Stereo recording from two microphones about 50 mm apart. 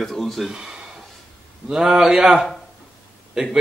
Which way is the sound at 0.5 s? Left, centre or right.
Centre.